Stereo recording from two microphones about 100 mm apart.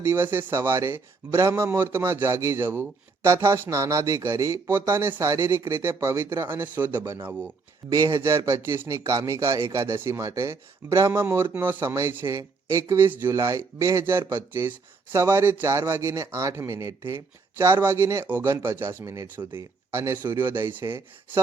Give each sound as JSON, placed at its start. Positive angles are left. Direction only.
{"t": 0.0, "sound": "speech", "side_deg": -20}
{"t": 7.9, "sound": "speech", "side_deg": -35}